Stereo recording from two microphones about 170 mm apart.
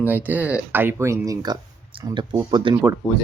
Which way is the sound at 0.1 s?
10° right (ahead or behind).